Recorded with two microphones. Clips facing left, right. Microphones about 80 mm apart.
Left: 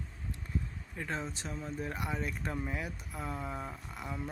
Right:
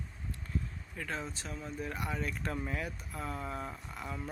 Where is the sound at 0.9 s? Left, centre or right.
Left.